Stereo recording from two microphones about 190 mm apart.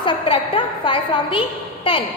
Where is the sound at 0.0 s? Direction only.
25° left (ahead or behind).